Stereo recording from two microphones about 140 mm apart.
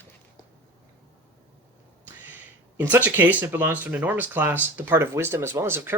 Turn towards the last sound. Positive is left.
turn(degrees=-15)  # may be behind; listen again after turning